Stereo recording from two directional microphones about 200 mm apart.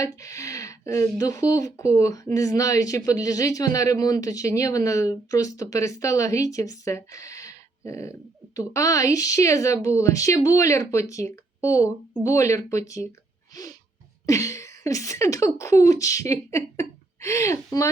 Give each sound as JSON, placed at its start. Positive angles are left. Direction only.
{"t": 0.0, "sound": "speech", "side_deg": 15}
{"t": 13.5, "sound": "a sound", "side_deg": 20}
{"t": 14.3, "sound": "speech", "side_deg": 15}